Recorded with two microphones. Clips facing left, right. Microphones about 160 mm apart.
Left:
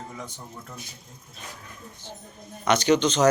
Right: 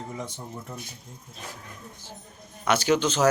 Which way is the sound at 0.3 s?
20° right (ahead or behind).